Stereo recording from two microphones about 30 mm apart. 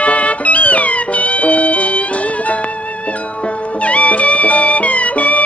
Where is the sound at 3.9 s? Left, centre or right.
Left.